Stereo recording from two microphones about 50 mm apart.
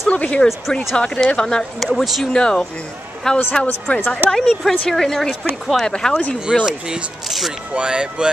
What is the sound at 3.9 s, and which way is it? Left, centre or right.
Speech, left.